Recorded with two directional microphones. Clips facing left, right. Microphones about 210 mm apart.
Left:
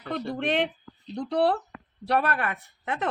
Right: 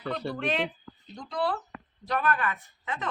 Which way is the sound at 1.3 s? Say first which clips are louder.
Left 6 dB; 65° left (ahead or behind).